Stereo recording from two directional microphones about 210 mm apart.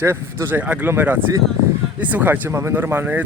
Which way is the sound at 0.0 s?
10° right (ahead or behind).